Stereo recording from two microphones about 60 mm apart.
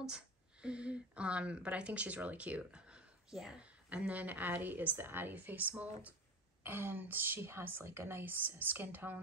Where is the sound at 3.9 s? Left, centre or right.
Right.